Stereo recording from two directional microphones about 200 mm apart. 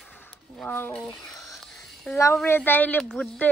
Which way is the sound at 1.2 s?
15° left (ahead or behind).